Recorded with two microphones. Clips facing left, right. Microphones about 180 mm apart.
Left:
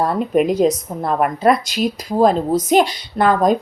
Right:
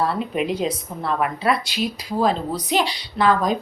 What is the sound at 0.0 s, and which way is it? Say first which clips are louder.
A woman's voice: left 6 dB; 45° left (ahead or behind).